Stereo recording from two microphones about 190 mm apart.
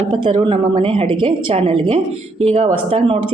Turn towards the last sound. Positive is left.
turn(degrees=-30)  # may be behind; listen again after turning